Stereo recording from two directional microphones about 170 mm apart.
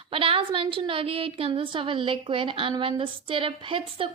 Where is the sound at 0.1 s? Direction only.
30° right (ahead or behind).